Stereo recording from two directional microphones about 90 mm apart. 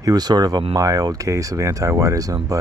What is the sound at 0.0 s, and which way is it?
Speech, 45° right (ahead or behind).